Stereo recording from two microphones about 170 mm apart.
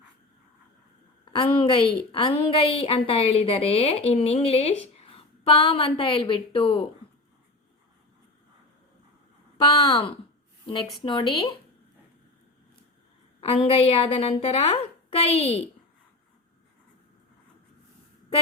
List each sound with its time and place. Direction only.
1.2 s a woman's voice: 30° left (ahead or behind)
11.0 s speech: 30° left (ahead or behind)
13.4 s a woman's voice: 35° left (ahead or behind)